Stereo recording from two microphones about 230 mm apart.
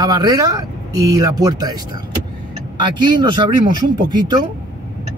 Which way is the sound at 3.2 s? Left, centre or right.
Centre.